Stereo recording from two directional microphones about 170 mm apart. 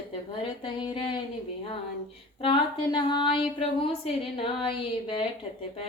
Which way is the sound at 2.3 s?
30° left (ahead or behind).